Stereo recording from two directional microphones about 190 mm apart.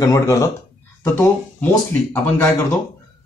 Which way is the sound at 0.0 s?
15° left (ahead or behind).